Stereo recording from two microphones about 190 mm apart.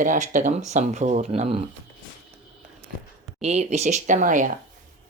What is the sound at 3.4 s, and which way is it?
Speech, 35° right (ahead or behind).